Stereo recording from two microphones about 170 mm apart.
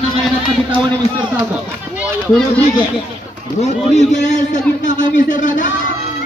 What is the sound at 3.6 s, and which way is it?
A man's voice, 40° left (ahead or behind).